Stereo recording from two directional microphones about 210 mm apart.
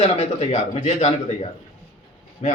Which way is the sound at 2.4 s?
30° left (ahead or behind).